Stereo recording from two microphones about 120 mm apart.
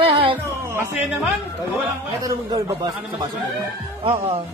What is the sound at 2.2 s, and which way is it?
A man's voice, 35° right (ahead or behind).